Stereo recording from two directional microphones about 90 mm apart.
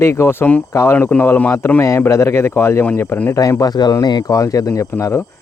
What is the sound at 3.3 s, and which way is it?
Speech, 40° left (ahead or behind).